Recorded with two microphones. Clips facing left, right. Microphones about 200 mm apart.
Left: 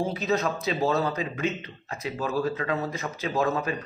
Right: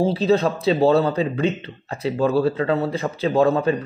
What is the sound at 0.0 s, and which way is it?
A man's voice, 30° right (ahead or behind).